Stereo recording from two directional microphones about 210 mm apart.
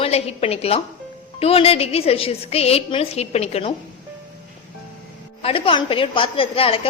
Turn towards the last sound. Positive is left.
turn(degrees=25)  # may be behind; listen again after turning